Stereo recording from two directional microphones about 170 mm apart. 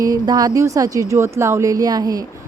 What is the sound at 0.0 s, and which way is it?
Speech, 20° right (ahead or behind).